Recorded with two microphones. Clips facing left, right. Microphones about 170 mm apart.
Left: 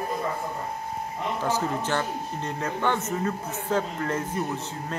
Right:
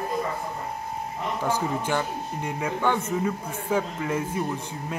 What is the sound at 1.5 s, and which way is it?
Speech, 10° right (ahead or behind).